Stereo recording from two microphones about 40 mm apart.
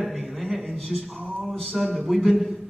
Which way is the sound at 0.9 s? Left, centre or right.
Right.